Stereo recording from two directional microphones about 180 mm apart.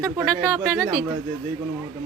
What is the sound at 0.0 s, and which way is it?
Speech, 15° right (ahead or behind).